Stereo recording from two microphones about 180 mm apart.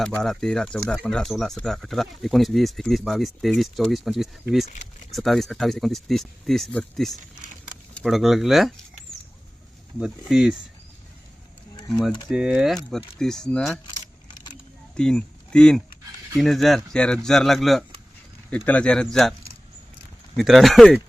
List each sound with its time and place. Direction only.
0.2 s speech: 5° left (ahead or behind)
7.4 s a sound: 45° right (ahead or behind)
7.9 s speech: centre (ahead or behind)
10.0 s speech: 5° right (ahead or behind)
11.9 s speech: 5° left (ahead or behind)
14.9 s speech: 5° left (ahead or behind)
20.3 s speech: centre (ahead or behind)